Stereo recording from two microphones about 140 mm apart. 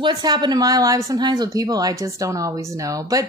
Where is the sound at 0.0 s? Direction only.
30° right (ahead or behind).